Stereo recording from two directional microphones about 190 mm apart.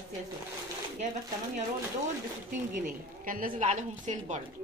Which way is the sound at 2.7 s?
45° right (ahead or behind).